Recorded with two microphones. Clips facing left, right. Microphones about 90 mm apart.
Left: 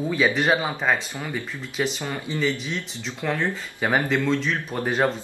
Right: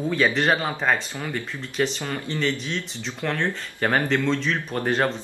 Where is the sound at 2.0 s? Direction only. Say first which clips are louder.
Even; 15° left (ahead or behind).